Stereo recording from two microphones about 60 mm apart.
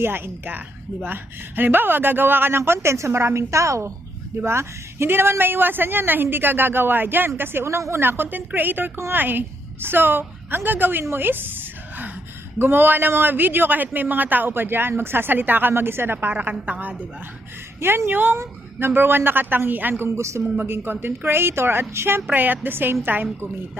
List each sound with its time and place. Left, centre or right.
0.0 s speech: right
4.4 s speech: right
8.0 s a woman's voice: right
17.7 s speech: right
22.3 s speech: right